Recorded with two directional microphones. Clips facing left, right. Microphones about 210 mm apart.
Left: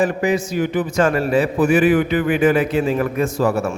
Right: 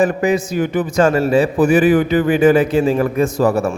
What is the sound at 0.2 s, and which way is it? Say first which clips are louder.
Speech: right 2 dB; 45° right (ahead or behind).